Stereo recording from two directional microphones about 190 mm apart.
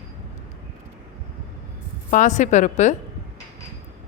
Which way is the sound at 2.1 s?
40° left (ahead or behind).